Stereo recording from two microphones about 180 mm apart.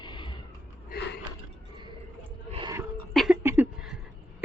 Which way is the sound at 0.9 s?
65° left (ahead or behind).